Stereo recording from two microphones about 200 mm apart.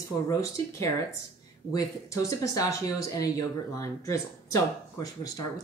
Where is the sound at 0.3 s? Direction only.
15° left (ahead or behind).